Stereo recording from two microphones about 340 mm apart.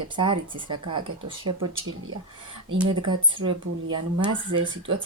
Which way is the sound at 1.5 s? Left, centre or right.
Right.